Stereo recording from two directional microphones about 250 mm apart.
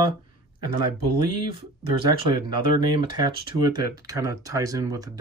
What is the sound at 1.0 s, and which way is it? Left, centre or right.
Speech, right.